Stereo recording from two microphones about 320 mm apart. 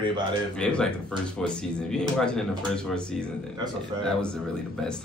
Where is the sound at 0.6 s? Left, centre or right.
Centre.